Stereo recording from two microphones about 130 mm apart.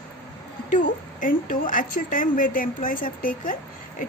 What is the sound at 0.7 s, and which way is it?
A woman's voice, 85° left.